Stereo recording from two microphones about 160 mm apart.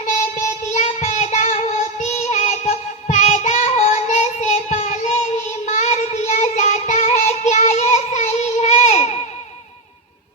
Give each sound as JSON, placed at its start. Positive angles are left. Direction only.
{"t": 0.0, "sound": "child singing", "side_deg": 50}